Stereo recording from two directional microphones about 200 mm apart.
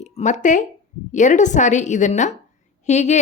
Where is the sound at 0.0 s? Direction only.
35° left (ahead or behind).